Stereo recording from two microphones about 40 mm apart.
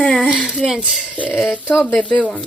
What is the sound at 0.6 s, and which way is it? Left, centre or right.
Speech, centre.